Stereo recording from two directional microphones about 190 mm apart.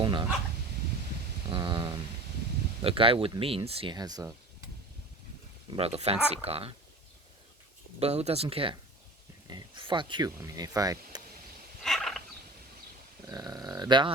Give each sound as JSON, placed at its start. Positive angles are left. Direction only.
{"t": 0.0, "sound": "dog", "side_deg": -25}
{"t": 1.5, "sound": "a sound", "side_deg": -25}
{"t": 2.8, "sound": "speech", "side_deg": -30}
{"t": 5.7, "sound": "speech", "side_deg": -30}
{"t": 7.9, "sound": "speech", "side_deg": -35}
{"t": 11.8, "sound": "turkey", "side_deg": 0}
{"t": 13.2, "sound": "speech", "side_deg": -20}